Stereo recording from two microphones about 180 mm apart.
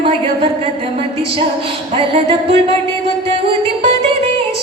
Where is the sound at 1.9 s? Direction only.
30° right (ahead or behind).